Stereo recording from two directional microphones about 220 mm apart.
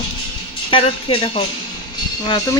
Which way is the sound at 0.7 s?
25° left (ahead or behind).